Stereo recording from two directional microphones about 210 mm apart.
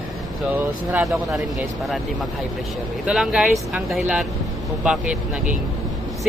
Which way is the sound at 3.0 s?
5° right (ahead or behind).